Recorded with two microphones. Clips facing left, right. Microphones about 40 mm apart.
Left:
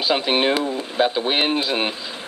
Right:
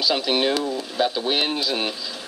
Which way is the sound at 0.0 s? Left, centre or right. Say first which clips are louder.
Left 2 dB; left.